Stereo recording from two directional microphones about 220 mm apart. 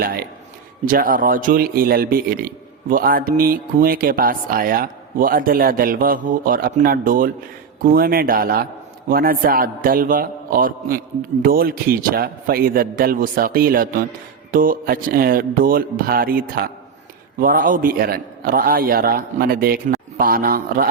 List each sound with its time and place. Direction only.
0.0 s a man's voice: 40° right (ahead or behind)